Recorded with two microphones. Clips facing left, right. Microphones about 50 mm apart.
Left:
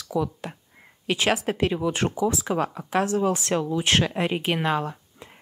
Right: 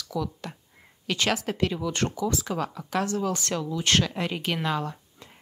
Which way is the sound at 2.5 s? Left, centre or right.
Left.